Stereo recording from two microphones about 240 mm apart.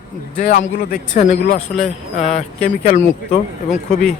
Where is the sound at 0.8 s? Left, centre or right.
Left.